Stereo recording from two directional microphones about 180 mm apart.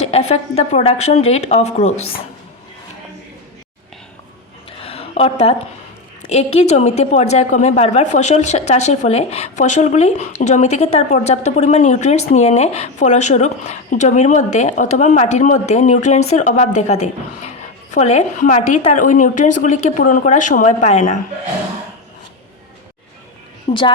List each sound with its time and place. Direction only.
0.0 s a woman's voice: 35° left (ahead or behind)
4.8 s a sound: 35° left (ahead or behind)
6.3 s a woman's voice: 35° left (ahead or behind)
23.7 s a woman's voice: 30° left (ahead or behind)